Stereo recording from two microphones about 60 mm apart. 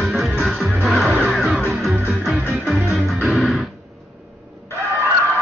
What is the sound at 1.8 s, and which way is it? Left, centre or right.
Music, centre.